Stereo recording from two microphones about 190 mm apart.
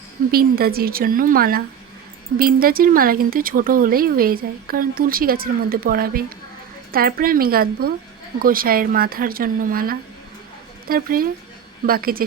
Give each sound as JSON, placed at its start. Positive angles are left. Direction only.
{"t": 0.3, "sound": "speech", "side_deg": -50}